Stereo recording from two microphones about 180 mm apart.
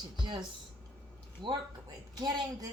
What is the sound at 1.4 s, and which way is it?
Speech, 25° right (ahead or behind).